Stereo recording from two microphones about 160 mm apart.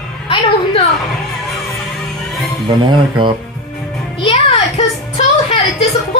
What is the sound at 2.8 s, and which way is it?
Speech, 30° right (ahead or behind).